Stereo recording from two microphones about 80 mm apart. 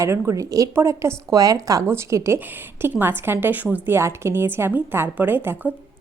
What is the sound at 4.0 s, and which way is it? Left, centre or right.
A woman's voice, right.